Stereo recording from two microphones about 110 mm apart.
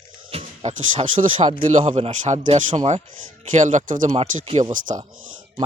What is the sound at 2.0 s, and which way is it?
Speech, 65° right (ahead or behind).